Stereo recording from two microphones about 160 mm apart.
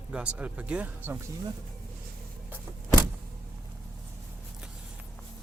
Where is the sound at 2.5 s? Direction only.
15° right (ahead or behind).